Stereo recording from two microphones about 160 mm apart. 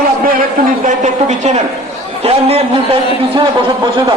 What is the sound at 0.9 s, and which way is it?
A woman's voice, 50° right (ahead or behind).